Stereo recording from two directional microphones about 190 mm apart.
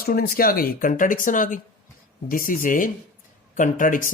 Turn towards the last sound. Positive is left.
turn(degrees=45)  # may be behind; listen again after turning